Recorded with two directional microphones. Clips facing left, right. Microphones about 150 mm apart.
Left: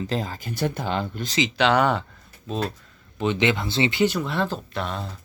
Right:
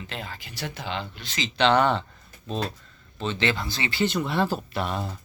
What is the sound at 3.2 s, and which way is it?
Speech, 15° left (ahead or behind).